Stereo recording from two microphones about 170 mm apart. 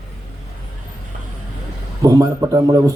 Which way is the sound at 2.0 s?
20° right (ahead or behind).